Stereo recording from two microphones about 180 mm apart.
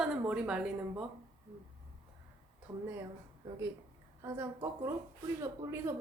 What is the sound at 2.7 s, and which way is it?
Speech, 15° right (ahead or behind).